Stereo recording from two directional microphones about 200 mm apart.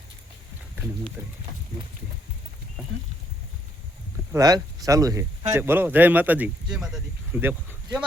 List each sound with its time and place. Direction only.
1.2 s speech: 10° right (ahead or behind)
4.3 s speech: 15° right (ahead or behind)